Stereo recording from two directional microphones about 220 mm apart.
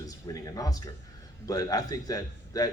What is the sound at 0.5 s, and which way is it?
A man's voice, 15° left (ahead or behind).